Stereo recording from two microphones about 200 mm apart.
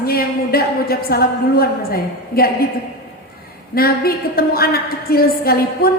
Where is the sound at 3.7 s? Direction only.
50° left (ahead or behind).